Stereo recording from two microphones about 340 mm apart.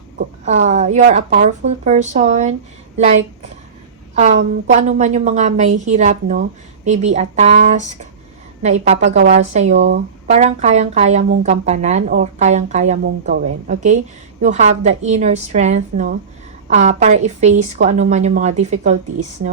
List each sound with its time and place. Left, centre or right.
0.2 s speech: centre
4.1 s speech: right